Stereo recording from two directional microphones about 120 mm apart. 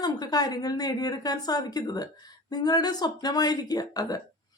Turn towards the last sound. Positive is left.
turn(degrees=30)  # may be behind; listen again after turning